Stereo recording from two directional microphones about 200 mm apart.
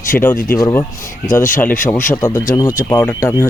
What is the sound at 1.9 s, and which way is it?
Speech, 10° left (ahead or behind).